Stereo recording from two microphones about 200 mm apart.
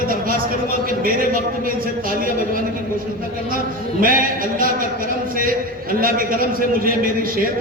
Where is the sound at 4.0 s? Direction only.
45° right (ahead or behind).